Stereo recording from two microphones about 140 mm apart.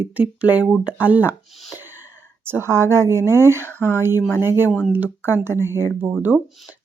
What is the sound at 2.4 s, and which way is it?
Speech, 15° right (ahead or behind).